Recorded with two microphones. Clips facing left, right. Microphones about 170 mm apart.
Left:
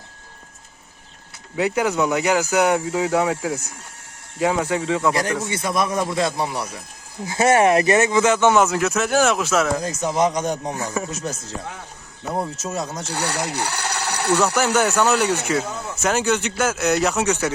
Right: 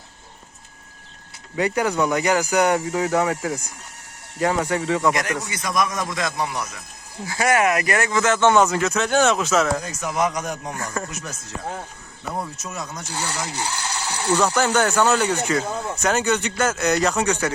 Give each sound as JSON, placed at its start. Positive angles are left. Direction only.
{"t": 1.5, "sound": "speech", "side_deg": 5}
{"t": 5.1, "sound": "a man's voice", "side_deg": 30}
{"t": 9.8, "sound": "speech", "side_deg": 25}
{"t": 10.8, "sound": "speech", "side_deg": 5}
{"t": 11.1, "sound": "speech", "side_deg": 25}
{"t": 12.6, "sound": "speech", "side_deg": 30}
{"t": 13.1, "sound": "speech", "side_deg": 65}
{"t": 13.5, "sound": "a sound", "side_deg": 65}
{"t": 14.4, "sound": "speech", "side_deg": 5}